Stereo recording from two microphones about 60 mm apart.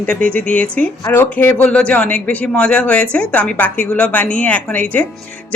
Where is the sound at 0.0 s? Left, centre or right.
Left.